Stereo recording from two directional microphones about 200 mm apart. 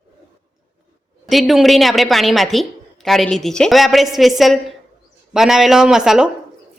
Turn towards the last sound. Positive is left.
turn(degrees=-5)  # may be behind; listen again after turning